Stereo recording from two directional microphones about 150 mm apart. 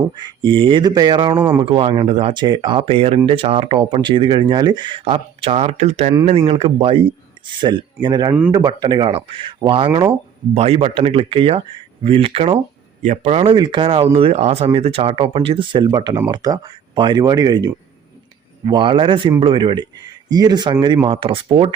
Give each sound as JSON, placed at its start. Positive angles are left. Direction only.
{"t": 0.2, "sound": "speech", "side_deg": -35}
{"t": 1.4, "sound": "speech", "side_deg": -15}
{"t": 1.6, "sound": "speech", "side_deg": -35}
{"t": 13.0, "sound": "a man's voice", "side_deg": -55}
{"t": 18.6, "sound": "speech", "side_deg": -30}